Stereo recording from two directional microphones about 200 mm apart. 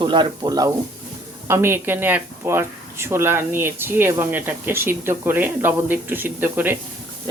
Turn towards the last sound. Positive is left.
turn(degrees=-10)  # may be behind; listen again after turning